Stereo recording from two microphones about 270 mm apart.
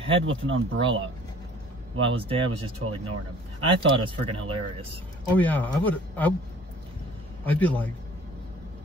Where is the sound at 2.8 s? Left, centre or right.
Right.